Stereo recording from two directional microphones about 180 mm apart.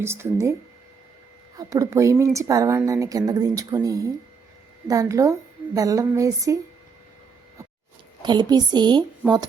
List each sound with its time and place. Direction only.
0.0 s speech: 15° right (ahead or behind)
1.5 s speech: 20° right (ahead or behind)
8.2 s speech: 25° right (ahead or behind)